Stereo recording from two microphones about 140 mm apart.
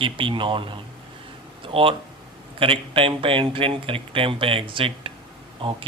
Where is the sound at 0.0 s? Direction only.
40° right (ahead or behind).